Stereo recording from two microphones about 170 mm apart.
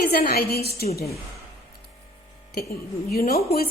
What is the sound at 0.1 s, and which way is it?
Speech, 65° left (ahead or behind).